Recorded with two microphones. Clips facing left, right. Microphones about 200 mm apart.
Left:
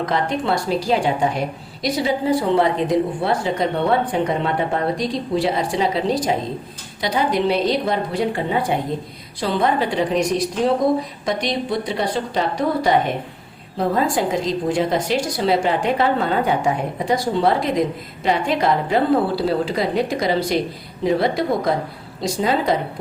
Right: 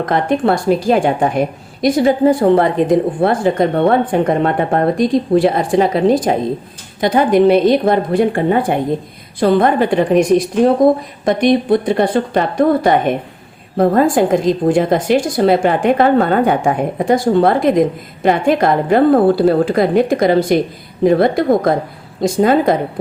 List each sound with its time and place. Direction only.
0.0 s a woman's voice: 55° right (ahead or behind)